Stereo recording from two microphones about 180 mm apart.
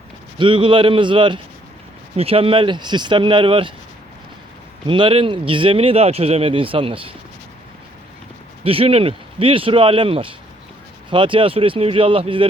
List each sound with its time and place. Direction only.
0.3 s speech: 30° right (ahead or behind)
4.9 s speech: 30° right (ahead or behind)
8.6 s speech: 30° right (ahead or behind)